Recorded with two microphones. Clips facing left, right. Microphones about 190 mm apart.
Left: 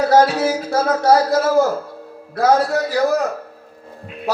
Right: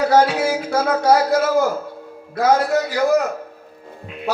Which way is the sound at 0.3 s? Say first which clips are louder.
Left 1 dB; 10° right (ahead or behind).